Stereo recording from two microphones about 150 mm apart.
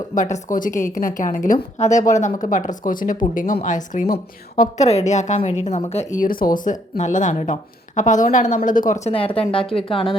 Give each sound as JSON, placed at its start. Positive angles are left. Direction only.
{"t": 0.1, "sound": "speech", "side_deg": 55}
{"t": 4.9, "sound": "a woman's voice", "side_deg": 50}
{"t": 6.1, "sound": "speech", "side_deg": 70}
{"t": 6.9, "sound": "speech", "side_deg": 55}
{"t": 9.0, "sound": "speech", "side_deg": 40}